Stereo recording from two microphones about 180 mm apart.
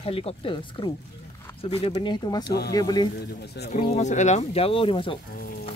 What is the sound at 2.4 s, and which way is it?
Speech, 60° left (ahead or behind).